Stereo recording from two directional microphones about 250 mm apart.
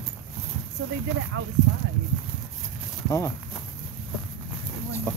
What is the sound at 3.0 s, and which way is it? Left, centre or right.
Speech, centre.